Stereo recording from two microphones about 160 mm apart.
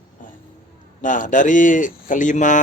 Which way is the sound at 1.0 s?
55° left (ahead or behind).